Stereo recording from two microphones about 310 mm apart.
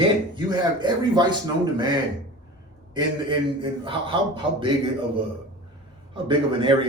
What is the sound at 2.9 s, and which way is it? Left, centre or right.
Speech, centre.